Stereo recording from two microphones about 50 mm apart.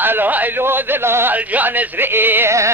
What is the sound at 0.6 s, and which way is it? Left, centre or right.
Speech, right.